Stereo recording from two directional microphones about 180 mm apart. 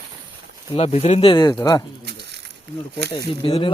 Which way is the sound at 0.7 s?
35° left (ahead or behind).